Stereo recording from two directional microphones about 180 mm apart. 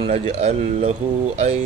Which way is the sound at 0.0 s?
35° right (ahead or behind).